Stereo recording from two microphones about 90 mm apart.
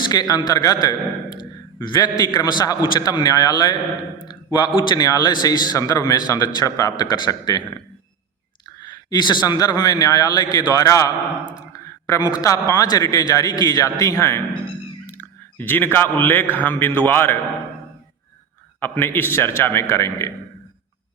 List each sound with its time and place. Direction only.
0.0 s speech: 45° left (ahead or behind)
1.4 s a man's voice: 55° left (ahead or behind)
4.3 s a man's voice: 55° left (ahead or behind)
4.9 s speech: 45° left (ahead or behind)
8.8 s speech: 50° left (ahead or behind)
11.7 s a sound: 35° left (ahead or behind)
12.3 s a man's voice: 40° left (ahead or behind); by 17.3 s 25° left (ahead or behind)
18.8 s a man's voice: 25° left (ahead or behind)